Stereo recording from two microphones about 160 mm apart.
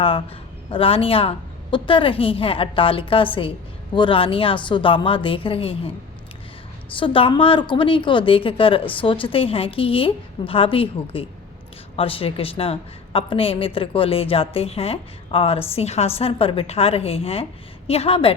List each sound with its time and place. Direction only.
0.0 s a woman's voice: 35° left (ahead or behind)
7.0 s a woman's voice: 35° left (ahead or behind)